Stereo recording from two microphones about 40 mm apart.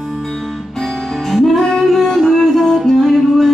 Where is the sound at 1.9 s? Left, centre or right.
Centre.